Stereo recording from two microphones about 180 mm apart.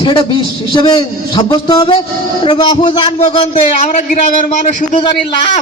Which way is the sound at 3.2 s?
35° left (ahead or behind).